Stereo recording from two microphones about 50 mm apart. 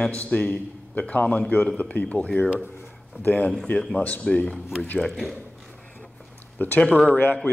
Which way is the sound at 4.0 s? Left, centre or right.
Left.